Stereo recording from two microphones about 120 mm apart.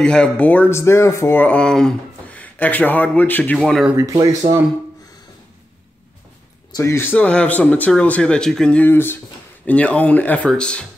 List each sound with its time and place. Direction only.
0.0 s speech: 5° left (ahead or behind)
3.5 s speech: centre (ahead or behind)
3.9 s speech: 25° right (ahead or behind)
6.8 s speech: 20° left (ahead or behind)